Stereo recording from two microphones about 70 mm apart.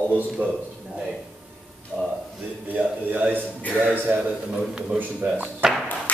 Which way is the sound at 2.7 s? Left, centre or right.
Right.